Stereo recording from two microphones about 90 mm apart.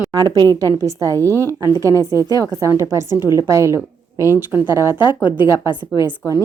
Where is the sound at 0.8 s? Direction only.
35° right (ahead or behind).